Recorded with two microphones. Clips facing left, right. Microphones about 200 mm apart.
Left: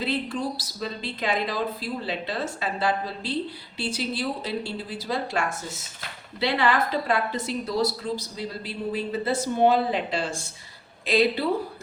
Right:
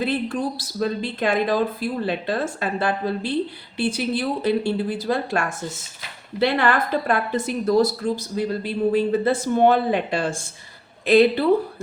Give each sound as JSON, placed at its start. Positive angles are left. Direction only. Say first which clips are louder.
{"t": 0.0, "sound": "a woman's voice", "louder": "right 4 dB", "side_deg": -55}